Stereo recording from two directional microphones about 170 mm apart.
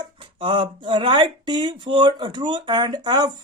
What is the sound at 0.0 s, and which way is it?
Speech, 30° right (ahead or behind).